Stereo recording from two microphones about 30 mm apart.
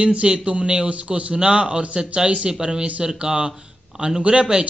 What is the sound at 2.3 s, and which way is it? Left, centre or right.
Speech, centre.